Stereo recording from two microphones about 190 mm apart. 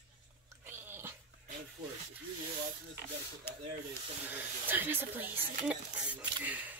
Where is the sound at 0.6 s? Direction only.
10° right (ahead or behind).